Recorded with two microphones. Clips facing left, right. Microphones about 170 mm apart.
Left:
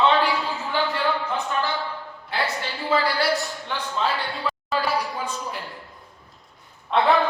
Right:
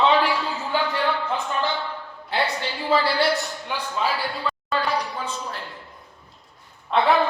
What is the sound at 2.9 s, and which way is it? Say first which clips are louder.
Speech: right 2 dB; 30° right (ahead or behind).